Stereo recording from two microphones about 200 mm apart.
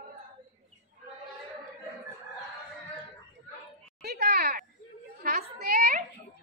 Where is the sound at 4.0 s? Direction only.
55° right (ahead or behind).